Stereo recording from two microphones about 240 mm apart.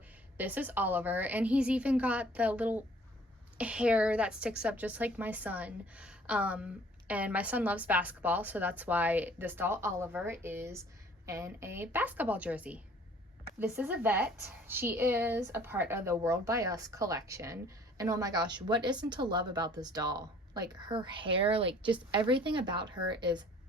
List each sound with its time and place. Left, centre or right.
0.3 s a woman's voice: centre